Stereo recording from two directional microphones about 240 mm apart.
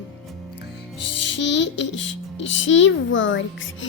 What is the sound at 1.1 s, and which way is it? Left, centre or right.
A child's voice, left.